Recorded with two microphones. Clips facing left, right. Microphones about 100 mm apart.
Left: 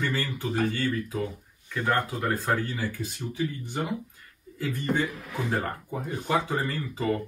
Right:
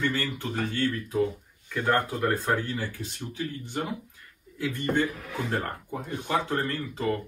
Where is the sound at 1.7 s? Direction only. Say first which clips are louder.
Right 1 dB; centre (ahead or behind).